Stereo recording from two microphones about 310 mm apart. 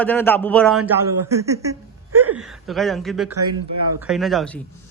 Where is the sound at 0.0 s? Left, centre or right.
Centre.